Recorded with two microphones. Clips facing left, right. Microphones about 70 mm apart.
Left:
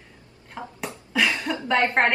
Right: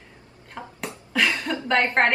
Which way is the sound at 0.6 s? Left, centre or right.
Centre.